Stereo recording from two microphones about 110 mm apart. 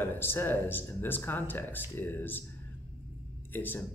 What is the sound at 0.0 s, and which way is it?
Speech, 20° left (ahead or behind).